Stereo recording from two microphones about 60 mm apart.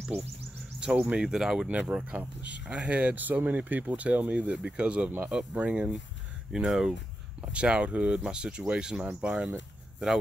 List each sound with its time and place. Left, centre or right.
0.7 s insect: centre
1.1 s speech: centre
6.5 s speech: centre
7.5 s speech: centre